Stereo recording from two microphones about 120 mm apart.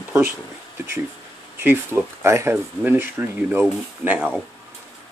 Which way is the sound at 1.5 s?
20° right (ahead or behind).